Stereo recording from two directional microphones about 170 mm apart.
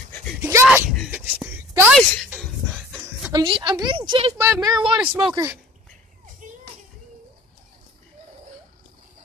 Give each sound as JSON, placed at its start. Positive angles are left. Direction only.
{"t": 0.4, "sound": "a sound", "side_deg": -15}
{"t": 3.3, "sound": "a woman's voice", "side_deg": -25}
{"t": 4.4, "sound": "a woman's voice", "side_deg": -15}
{"t": 5.2, "sound": "a woman's voice", "side_deg": -20}
{"t": 6.4, "sound": "children playing", "side_deg": -50}